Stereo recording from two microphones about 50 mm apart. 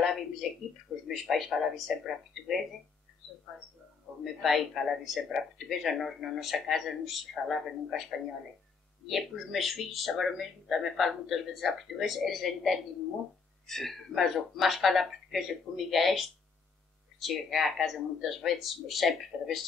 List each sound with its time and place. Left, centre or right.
0.0 s a sound: centre
1.0 s speech: centre
4.2 s speech: centre
9.0 s speech: centre